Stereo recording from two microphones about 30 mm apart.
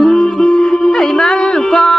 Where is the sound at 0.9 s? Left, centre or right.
Left.